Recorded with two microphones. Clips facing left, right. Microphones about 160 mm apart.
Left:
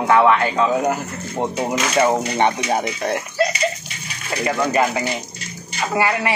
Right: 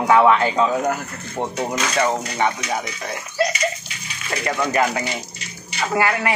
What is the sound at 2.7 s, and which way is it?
Speech, 35° left (ahead or behind).